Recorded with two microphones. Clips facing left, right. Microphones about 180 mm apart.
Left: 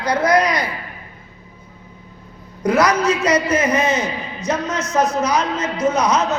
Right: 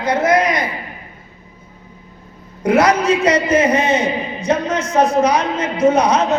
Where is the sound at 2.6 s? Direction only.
30° right (ahead or behind).